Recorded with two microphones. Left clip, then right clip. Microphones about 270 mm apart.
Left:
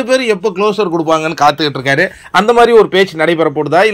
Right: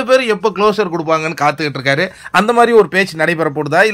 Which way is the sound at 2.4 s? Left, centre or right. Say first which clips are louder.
Left 3 dB; right.